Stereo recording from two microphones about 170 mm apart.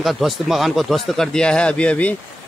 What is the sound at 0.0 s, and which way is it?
Speech, centre (ahead or behind).